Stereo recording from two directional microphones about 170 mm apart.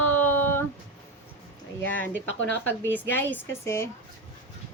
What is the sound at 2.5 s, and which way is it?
Speech, 10° left (ahead or behind).